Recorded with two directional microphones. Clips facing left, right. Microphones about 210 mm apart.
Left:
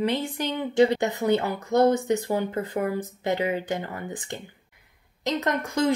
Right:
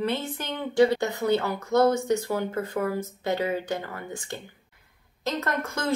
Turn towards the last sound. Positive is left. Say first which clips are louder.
# left 5 dB
turn(degrees=15)  # may be behind; listen again after turning